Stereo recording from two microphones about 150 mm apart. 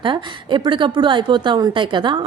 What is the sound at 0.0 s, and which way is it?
A woman's voice, 30° right (ahead or behind).